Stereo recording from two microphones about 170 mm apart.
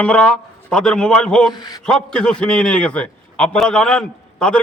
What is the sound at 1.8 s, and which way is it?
A man's voice, 5° left (ahead or behind).